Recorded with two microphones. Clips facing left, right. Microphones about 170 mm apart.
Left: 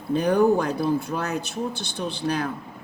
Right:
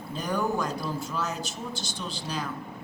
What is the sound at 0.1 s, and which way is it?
A woman's voice, 60° left (ahead or behind).